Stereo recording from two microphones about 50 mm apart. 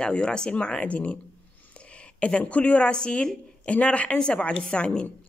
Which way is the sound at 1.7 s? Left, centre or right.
Left.